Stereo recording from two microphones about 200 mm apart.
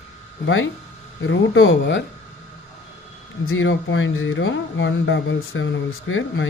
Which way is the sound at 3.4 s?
85° left.